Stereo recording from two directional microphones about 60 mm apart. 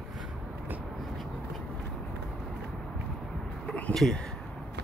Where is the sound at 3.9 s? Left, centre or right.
Centre.